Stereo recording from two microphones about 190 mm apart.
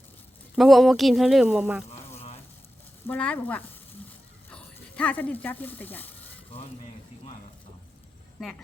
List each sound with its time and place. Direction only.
0.5 s speech: centre (ahead or behind)
2.1 s a sound: 35° left (ahead or behind)
3.1 s speech: 5° left (ahead or behind)